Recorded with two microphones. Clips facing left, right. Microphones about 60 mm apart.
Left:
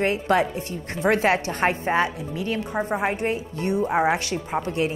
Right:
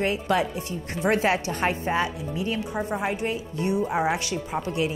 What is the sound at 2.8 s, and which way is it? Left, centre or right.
Speech, left.